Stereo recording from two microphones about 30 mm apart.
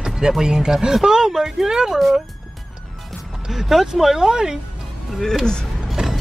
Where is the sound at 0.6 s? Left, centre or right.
Centre.